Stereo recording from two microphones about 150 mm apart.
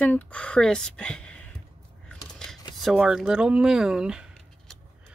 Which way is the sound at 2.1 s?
5° left (ahead or behind).